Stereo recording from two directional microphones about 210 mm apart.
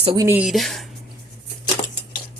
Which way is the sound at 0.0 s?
25° right (ahead or behind).